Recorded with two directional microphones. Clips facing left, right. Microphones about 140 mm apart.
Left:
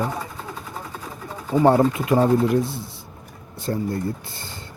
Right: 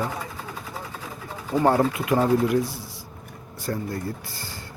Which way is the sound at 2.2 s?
30° left (ahead or behind).